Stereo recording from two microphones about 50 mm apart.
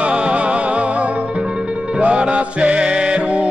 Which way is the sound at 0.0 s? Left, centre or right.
Right.